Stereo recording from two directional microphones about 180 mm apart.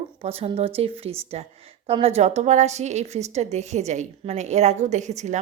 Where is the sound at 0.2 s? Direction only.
35° right (ahead or behind).